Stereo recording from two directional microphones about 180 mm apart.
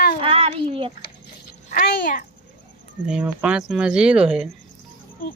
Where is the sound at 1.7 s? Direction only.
50° left (ahead or behind).